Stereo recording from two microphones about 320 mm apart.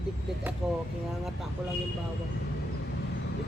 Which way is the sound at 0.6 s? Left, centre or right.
Centre.